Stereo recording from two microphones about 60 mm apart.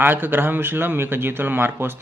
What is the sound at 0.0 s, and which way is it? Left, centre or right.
Speech, right.